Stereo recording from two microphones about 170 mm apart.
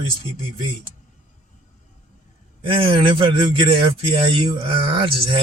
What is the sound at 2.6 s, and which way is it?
A man's voice, 30° right (ahead or behind).